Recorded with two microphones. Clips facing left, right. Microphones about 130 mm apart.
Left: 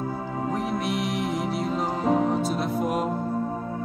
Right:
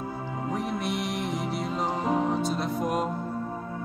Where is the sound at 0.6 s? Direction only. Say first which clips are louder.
Left 2 dB; centre (ahead or behind).